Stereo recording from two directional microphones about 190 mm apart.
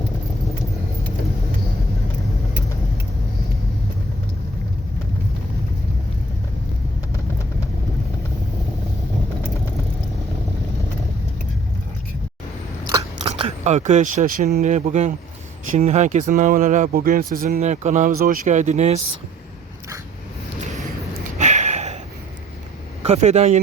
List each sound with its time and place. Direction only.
13.2 s speech: 30° right (ahead or behind)
21.3 s a sound: 40° right (ahead or behind)
23.0 s speech: 35° right (ahead or behind)